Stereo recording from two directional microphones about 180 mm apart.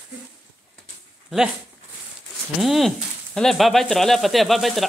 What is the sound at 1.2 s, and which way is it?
Speech, centre (ahead or behind).